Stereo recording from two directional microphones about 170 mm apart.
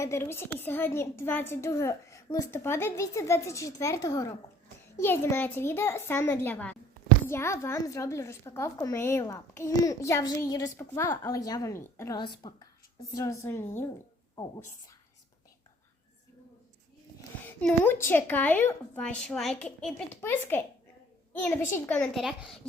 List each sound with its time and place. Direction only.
0.0 s a woman's voice: 15° left (ahead or behind)
17.4 s a woman's voice: 10° left (ahead or behind)